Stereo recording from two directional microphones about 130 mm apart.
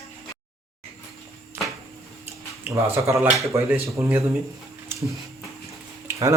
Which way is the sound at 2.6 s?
20° right (ahead or behind).